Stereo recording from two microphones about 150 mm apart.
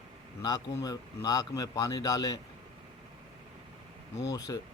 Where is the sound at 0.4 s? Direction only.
25° left (ahead or behind).